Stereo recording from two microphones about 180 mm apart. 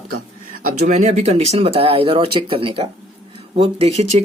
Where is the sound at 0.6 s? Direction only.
40° right (ahead or behind).